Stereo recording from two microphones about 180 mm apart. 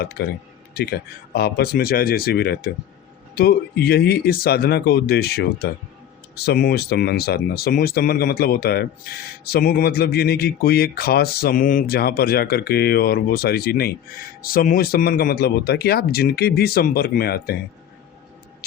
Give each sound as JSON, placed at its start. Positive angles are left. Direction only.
{"t": 0.0, "sound": "speech", "side_deg": 65}